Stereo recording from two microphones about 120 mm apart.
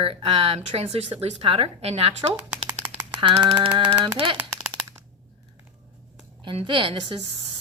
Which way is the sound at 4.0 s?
45° right (ahead or behind).